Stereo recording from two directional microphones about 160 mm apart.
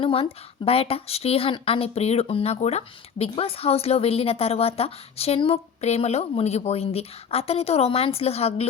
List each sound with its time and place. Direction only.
0.0 s speech: 35° left (ahead or behind)